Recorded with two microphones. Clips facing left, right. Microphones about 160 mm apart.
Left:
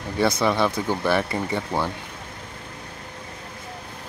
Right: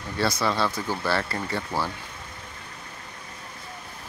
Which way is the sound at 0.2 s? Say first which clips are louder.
Left 4 dB; 20° left (ahead or behind).